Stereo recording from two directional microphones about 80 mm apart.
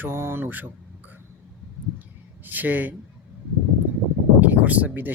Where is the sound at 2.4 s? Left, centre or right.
Right.